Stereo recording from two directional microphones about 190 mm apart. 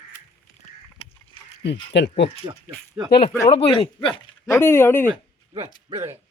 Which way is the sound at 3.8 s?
25° left (ahead or behind).